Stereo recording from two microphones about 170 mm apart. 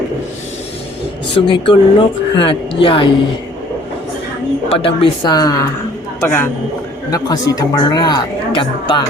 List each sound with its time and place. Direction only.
1.4 s speech: 30° left (ahead or behind)
4.9 s a man's voice: 25° left (ahead or behind)